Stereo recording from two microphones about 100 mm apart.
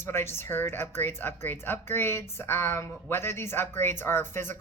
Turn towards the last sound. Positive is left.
turn(degrees=25)  # may be behind; listen again after turning